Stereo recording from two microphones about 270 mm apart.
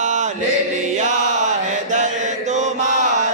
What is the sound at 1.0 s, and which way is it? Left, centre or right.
Chant, right.